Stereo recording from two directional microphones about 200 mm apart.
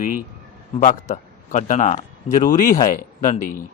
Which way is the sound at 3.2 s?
45° left (ahead or behind).